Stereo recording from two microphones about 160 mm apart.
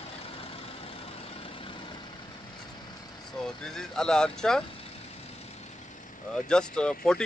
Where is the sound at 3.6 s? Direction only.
5° left (ahead or behind).